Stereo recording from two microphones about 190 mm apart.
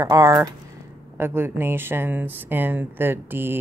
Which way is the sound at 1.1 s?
10° right (ahead or behind).